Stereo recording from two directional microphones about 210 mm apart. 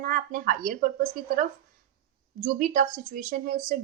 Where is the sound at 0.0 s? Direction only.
40° right (ahead or behind).